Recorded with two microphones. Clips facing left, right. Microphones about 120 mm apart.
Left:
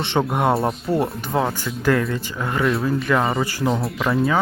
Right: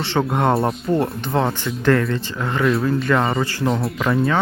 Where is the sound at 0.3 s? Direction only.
10° left (ahead or behind).